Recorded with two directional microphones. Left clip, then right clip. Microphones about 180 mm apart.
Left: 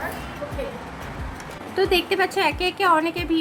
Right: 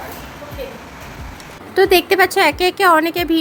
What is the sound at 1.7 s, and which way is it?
Speech, 45° right (ahead or behind).